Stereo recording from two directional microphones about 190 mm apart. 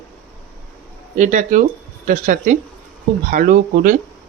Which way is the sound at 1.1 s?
40° right (ahead or behind).